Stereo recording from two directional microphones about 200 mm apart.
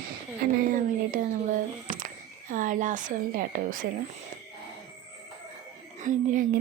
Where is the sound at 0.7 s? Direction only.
45° right (ahead or behind).